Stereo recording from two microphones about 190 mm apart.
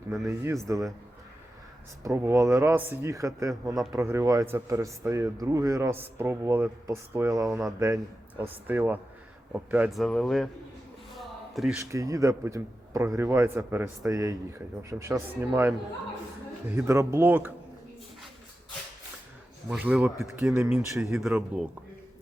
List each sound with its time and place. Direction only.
0.3 s a man's voice: 15° right (ahead or behind)
2.0 s a man's voice: 15° right (ahead or behind); by 10.5 s centre (ahead or behind)
11.1 s a sound: centre (ahead or behind)
11.8 s a man's voice: 15° right (ahead or behind)
19.7 s a man's voice: 10° right (ahead or behind)